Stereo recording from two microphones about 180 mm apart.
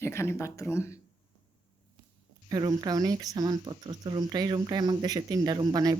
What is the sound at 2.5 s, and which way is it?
Speech, 20° right (ahead or behind).